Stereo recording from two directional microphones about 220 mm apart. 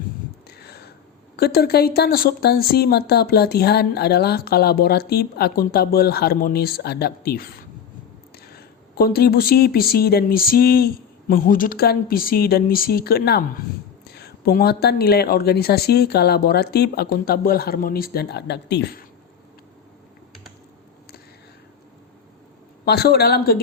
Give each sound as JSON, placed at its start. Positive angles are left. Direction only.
{"t": 0.4, "sound": "a sound", "side_deg": 45}
{"t": 1.4, "sound": "speech", "side_deg": 45}
{"t": 22.9, "sound": "speech", "side_deg": 45}